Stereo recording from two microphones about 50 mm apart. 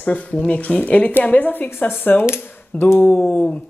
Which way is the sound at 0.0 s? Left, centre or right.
Left.